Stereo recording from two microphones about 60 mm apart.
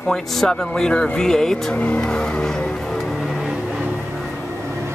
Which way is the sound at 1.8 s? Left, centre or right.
Centre.